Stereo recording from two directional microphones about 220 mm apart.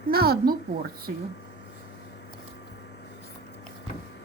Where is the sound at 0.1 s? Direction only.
45° right (ahead or behind).